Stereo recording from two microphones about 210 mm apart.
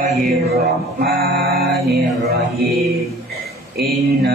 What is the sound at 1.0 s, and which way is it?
Mantra, 45° right (ahead or behind).